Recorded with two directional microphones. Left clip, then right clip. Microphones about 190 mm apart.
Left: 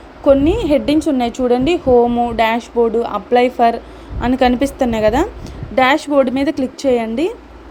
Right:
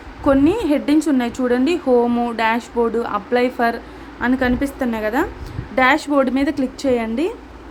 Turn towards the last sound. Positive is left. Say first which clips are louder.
# left 3 dB
turn(degrees=10)  # may be behind; listen again after turning